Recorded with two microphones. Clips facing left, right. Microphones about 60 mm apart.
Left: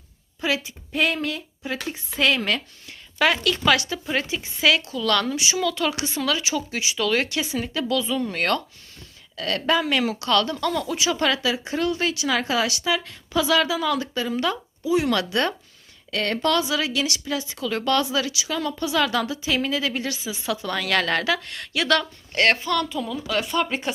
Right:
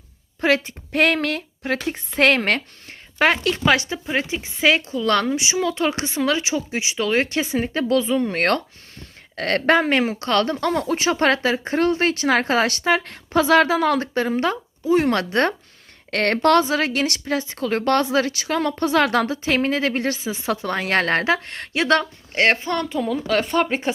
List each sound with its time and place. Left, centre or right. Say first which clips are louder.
0.4 s speech: right 6 dB; right
16.1 s speech: right 6 dB; right